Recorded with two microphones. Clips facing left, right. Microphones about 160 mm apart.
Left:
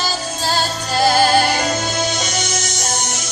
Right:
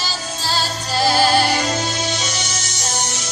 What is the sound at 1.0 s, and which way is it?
Music, 50° left (ahead or behind).